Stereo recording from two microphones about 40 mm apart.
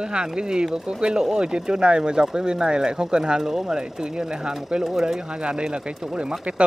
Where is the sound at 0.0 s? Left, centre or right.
Right.